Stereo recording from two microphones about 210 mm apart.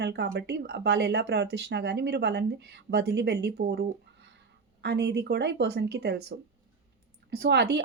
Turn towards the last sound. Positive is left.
turn(degrees=-55)  # may be behind; listen again after turning